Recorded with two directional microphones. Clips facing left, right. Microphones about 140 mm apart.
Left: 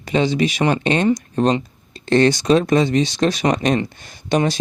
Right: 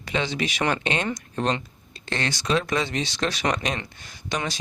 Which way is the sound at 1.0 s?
20° left (ahead or behind).